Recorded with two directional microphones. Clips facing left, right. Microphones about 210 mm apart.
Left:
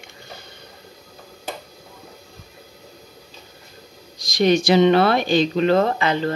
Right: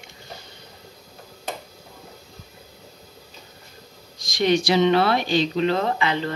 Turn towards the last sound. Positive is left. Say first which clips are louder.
# left 4 dB
turn(degrees=45)  # may be behind; listen again after turning